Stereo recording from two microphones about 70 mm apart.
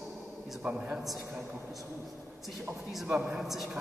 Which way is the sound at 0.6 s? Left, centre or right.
Centre.